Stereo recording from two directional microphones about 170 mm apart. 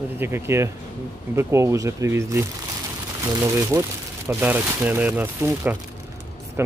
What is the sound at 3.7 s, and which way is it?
Speech, 20° right (ahead or behind).